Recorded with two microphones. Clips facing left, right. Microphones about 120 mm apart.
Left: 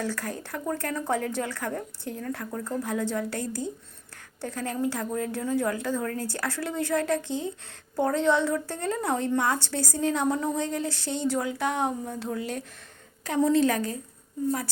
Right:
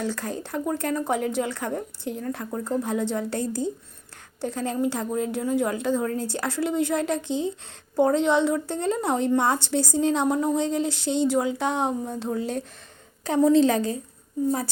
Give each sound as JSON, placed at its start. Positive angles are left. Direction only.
{"t": 0.0, "sound": "a woman's voice", "side_deg": -20}